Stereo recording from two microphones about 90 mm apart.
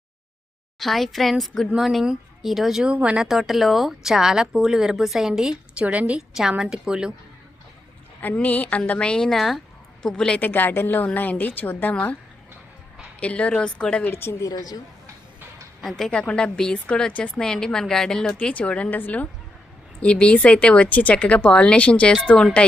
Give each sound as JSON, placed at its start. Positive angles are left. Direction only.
{"t": 0.8, "sound": "speech", "side_deg": 0}
{"t": 3.2, "sound": "speech", "side_deg": -5}
{"t": 5.8, "sound": "a woman's voice", "side_deg": -15}
{"t": 8.2, "sound": "a woman's voice", "side_deg": 20}
{"t": 13.1, "sound": "a woman's voice", "side_deg": 15}
{"t": 14.1, "sound": "a woman's voice", "side_deg": 25}
{"t": 14.4, "sound": "speech", "side_deg": 45}
{"t": 15.8, "sound": "a woman's voice", "side_deg": 5}